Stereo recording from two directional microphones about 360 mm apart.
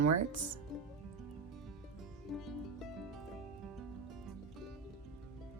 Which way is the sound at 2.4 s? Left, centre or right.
Centre.